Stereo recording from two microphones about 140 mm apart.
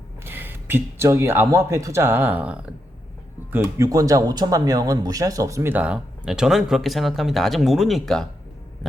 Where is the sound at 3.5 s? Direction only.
25° right (ahead or behind).